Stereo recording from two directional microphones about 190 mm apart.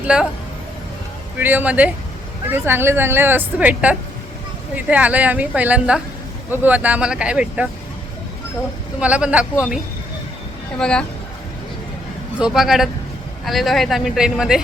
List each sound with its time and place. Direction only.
0.0 s speech: 5° right (ahead or behind)
1.4 s speech: 10° right (ahead or behind)
9.0 s speech: 5° right (ahead or behind)
10.8 s speech: 5° left (ahead or behind)
12.4 s speech: centre (ahead or behind)